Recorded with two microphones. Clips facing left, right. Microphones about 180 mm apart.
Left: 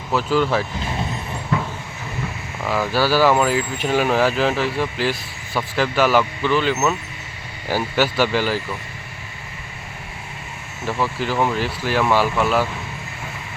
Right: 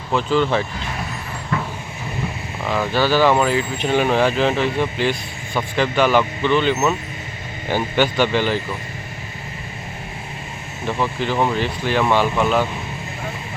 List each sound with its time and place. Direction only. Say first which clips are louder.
0.1 s speech: right 1 dB; 5° left (ahead or behind)
1.5 s vehicle: left 1 dB; 20° left (ahead or behind)
2.6 s speech: right 1 dB; 5° left (ahead or behind)
7.9 s speech: right 1 dB; 5° left (ahead or behind)
11.0 s speech: right 1 dB; 5° left (ahead or behind)